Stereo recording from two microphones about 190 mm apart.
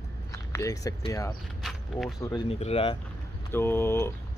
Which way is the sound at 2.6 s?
30° left (ahead or behind).